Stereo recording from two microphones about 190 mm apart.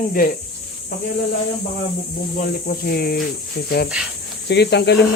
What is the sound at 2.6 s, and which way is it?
Speech, 50° left (ahead or behind).